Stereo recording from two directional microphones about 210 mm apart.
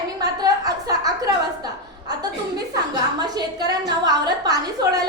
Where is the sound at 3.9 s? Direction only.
20° right (ahead or behind).